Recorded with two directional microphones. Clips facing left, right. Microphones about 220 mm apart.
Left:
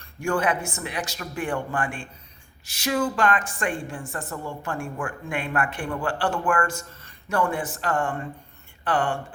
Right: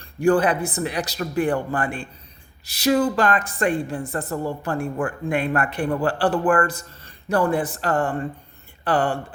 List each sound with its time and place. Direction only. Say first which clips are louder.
0.0 s a woman's voice: right 7 dB; 35° right (ahead or behind)